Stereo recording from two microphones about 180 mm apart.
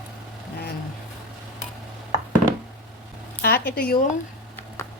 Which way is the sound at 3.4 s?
55° left (ahead or behind).